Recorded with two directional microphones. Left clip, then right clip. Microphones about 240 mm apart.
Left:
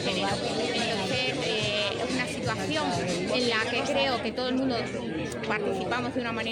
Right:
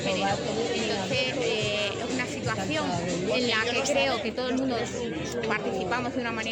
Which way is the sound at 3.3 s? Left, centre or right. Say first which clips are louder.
Right 1 dB; centre.